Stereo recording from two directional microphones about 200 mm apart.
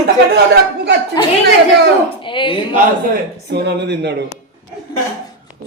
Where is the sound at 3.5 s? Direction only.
55° right (ahead or behind).